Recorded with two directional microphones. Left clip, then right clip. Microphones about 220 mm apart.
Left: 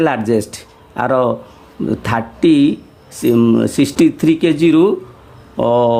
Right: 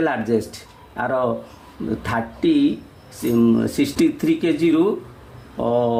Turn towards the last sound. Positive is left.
turn(degrees=45)  # may be behind; listen again after turning